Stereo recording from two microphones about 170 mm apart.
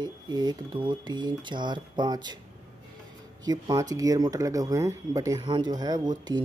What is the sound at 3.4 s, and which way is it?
Speech, 25° right (ahead or behind).